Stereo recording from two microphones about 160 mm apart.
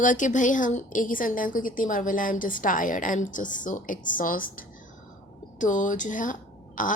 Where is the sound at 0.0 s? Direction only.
55° left (ahead or behind).